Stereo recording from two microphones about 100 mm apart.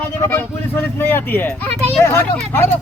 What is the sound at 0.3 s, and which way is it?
A child's voice, 20° left (ahead or behind).